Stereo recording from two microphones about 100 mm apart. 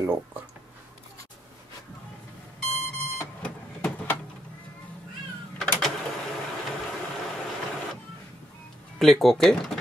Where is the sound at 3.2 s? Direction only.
15° left (ahead or behind).